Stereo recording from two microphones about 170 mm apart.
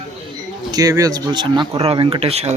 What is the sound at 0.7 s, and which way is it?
Speech, 20° right (ahead or behind).